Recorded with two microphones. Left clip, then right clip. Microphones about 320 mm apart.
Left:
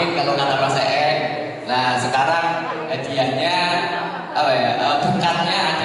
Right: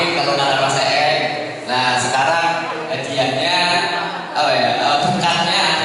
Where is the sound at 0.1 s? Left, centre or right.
Centre.